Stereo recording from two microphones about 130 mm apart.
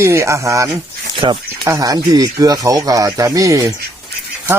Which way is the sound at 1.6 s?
25° right (ahead or behind).